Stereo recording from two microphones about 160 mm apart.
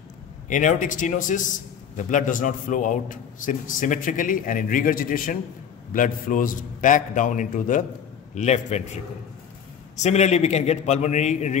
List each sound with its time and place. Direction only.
0.5 s a man's voice: 55° left (ahead or behind)